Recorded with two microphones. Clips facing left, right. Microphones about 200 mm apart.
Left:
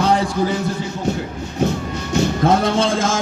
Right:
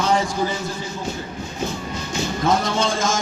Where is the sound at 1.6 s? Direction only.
65° left (ahead or behind).